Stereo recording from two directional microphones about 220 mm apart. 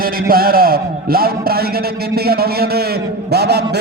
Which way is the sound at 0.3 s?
45° right (ahead or behind).